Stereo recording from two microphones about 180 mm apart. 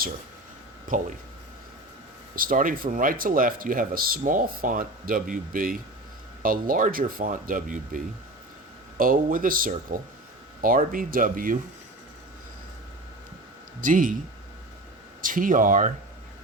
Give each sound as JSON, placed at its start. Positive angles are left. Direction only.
{"t": 0.9, "sound": "speech", "side_deg": -50}
{"t": 2.3, "sound": "speech", "side_deg": -50}
{"t": 13.8, "sound": "speech", "side_deg": -45}
{"t": 15.2, "sound": "speech", "side_deg": -50}